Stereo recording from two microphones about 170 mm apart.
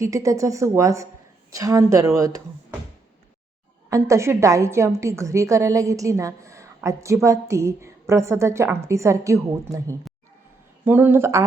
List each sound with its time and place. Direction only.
0.0 s speech: 20° right (ahead or behind)
3.8 s a woman's voice: 20° right (ahead or behind)